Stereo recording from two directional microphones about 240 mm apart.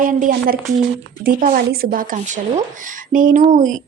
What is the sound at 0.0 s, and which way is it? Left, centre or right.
A woman's voice, right.